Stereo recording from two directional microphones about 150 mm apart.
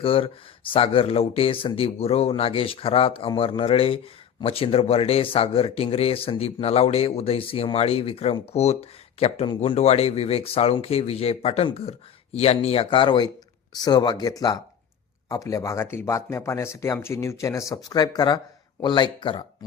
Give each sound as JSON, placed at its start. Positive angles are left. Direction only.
{"t": 0.0, "sound": "speech", "side_deg": 40}